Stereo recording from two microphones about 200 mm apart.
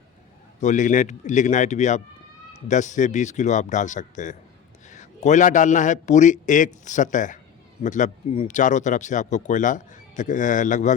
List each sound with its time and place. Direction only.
0.6 s a man's voice: 40° left (ahead or behind)